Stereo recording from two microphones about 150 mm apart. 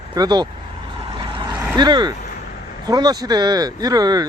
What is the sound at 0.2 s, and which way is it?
Speech, 30° right (ahead or behind).